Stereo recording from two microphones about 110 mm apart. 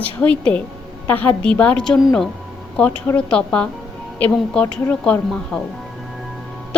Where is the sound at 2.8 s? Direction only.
15° left (ahead or behind).